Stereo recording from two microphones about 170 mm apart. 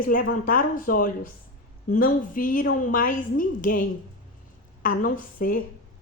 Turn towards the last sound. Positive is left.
turn(degrees=55)  # may be behind; listen again after turning